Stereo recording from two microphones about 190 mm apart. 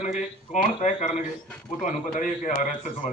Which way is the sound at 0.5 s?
35° left (ahead or behind).